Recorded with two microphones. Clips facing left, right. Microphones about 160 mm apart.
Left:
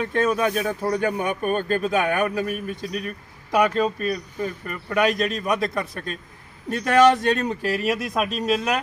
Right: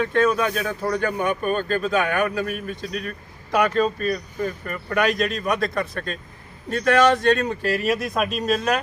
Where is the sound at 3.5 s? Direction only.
5° left (ahead or behind).